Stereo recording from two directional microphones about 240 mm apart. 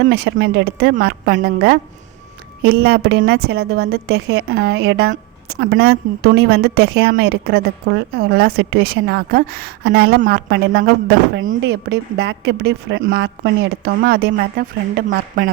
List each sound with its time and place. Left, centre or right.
0.0 s a woman's voice: right